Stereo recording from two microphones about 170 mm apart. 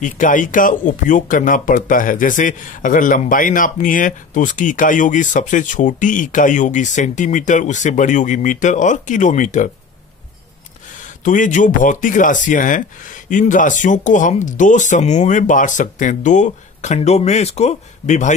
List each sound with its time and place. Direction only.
0.0 s speech: 50° left (ahead or behind)
11.2 s speech: 50° left (ahead or behind)